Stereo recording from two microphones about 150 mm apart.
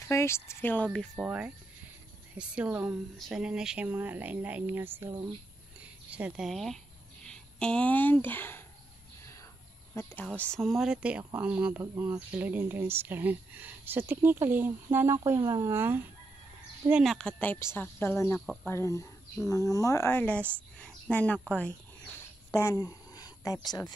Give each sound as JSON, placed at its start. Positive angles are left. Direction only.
{"t": 0.1, "sound": "speech", "side_deg": 20}
{"t": 1.1, "sound": "speech", "side_deg": -10}
{"t": 9.9, "sound": "speech", "side_deg": 15}
{"t": 16.9, "sound": "speech", "side_deg": 0}
{"t": 18.4, "sound": "speech", "side_deg": 0}
{"t": 18.7, "sound": "speech", "side_deg": 20}
{"t": 21.5, "sound": "a sound", "side_deg": 10}